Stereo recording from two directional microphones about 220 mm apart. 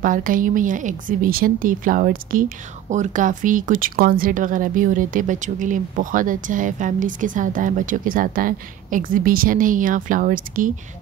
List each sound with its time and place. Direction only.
0.0 s speech: 40° right (ahead or behind)